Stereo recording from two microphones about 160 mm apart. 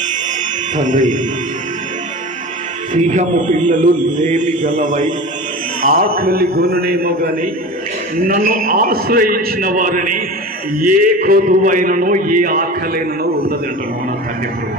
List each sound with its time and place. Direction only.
0.7 s speech: 55° right (ahead or behind)
2.9 s speech: 50° right (ahead or behind)
5.8 s a man's voice: 65° right (ahead or behind)